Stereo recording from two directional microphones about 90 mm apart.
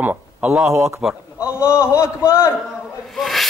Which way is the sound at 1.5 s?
30° left (ahead or behind).